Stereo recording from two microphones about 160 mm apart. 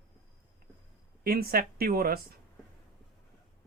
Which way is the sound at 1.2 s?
70° right (ahead or behind).